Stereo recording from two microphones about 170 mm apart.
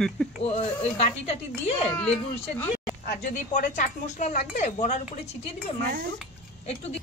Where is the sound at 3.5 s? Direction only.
45° left (ahead or behind).